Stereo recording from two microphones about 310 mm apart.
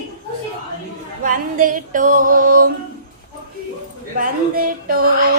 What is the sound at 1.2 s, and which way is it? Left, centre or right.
Music, right.